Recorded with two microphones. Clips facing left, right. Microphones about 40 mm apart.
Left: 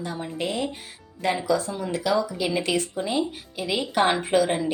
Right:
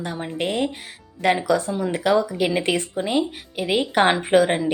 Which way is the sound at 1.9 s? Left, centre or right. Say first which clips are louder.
Right 3 dB; right.